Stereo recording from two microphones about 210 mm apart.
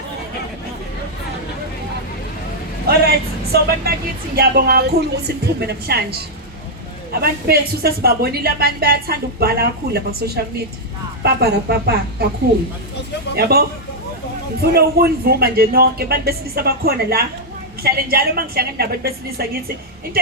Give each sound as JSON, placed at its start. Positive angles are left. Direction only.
{"t": 2.8, "sound": "speech", "side_deg": -50}
{"t": 7.2, "sound": "speech", "side_deg": -45}
{"t": 13.3, "sound": "speech", "side_deg": -50}